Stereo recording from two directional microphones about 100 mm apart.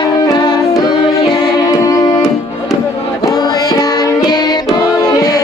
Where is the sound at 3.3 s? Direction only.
45° left (ahead or behind).